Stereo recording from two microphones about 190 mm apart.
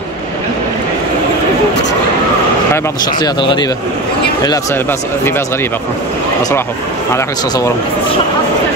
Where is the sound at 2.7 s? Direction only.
15° left (ahead or behind).